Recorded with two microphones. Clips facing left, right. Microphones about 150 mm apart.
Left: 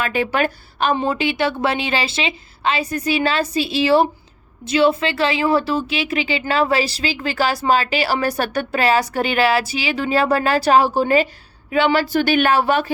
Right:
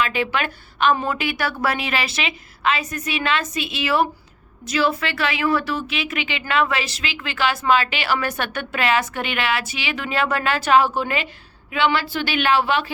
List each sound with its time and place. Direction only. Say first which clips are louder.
0.0 s a woman's voice: left 3 dB; 45° left (ahead or behind)